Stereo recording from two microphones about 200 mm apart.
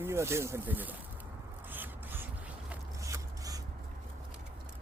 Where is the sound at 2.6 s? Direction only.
15° right (ahead or behind).